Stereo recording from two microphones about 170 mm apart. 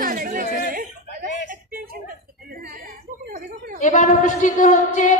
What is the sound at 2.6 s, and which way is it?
Chuckle, 65° right (ahead or behind).